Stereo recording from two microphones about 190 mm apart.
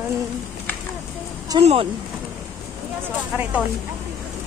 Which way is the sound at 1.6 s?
35° right (ahead or behind).